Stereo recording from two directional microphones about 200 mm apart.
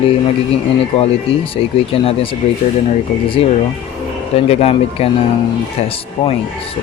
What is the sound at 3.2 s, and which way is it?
Speech, 30° left (ahead or behind).